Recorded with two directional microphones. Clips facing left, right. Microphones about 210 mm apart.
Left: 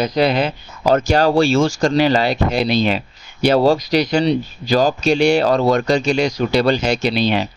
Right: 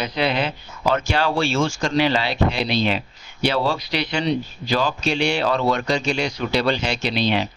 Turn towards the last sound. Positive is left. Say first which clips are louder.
# left 4 dB
turn(degrees=45)  # may be behind; listen again after turning